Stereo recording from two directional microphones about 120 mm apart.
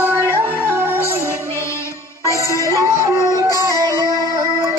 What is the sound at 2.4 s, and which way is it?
Music, 25° left (ahead or behind).